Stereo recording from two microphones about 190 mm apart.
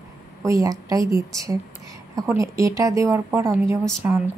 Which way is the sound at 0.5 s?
15° right (ahead or behind).